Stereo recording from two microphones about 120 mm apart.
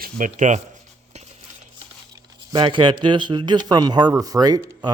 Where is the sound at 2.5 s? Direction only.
40° right (ahead or behind).